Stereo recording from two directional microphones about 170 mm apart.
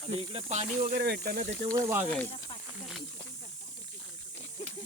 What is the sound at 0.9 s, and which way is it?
Speech, 70° right (ahead or behind).